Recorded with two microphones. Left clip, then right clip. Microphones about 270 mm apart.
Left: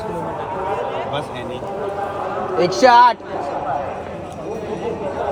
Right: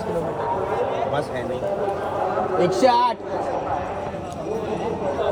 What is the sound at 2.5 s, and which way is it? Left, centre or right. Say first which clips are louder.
Speech: left 7 dB; centre.